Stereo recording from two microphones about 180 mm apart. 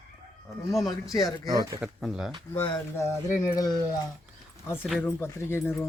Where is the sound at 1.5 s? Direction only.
20° right (ahead or behind).